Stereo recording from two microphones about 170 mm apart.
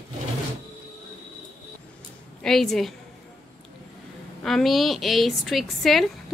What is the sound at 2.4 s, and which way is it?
Speech, 5° left (ahead or behind).